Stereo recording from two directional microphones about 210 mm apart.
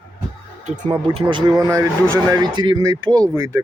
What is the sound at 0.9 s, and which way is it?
Speech, 20° right (ahead or behind).